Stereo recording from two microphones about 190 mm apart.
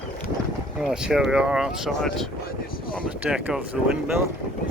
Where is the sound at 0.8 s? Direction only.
5° right (ahead or behind).